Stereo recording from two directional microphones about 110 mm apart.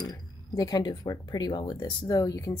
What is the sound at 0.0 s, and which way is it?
Speech, 35° left (ahead or behind).